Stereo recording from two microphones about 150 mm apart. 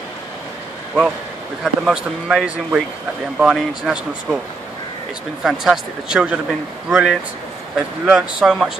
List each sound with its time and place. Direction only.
1.6 s speech: 5° right (ahead or behind)
5.4 s speech: 5° right (ahead or behind)